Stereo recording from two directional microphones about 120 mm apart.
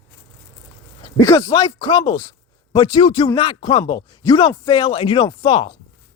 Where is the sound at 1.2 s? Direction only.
30° left (ahead or behind); by 5.7 s 45° left (ahead or behind).